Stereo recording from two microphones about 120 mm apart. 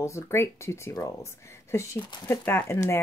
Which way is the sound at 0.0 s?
20° left (ahead or behind).